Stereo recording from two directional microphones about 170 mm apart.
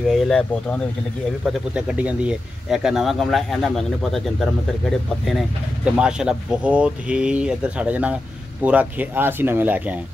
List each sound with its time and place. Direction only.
0.1 s speech: centre (ahead or behind)